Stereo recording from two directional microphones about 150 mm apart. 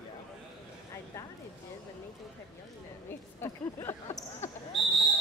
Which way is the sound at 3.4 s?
15° left (ahead or behind).